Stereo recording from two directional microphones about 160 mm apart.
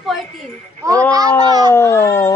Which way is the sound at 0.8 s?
20° right (ahead or behind).